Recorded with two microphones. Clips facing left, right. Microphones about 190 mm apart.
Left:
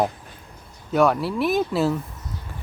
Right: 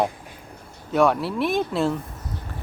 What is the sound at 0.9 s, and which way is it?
Speech, centre (ahead or behind).